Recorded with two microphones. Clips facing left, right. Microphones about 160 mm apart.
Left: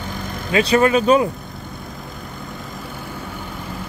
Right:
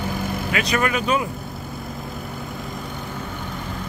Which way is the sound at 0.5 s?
30° left (ahead or behind).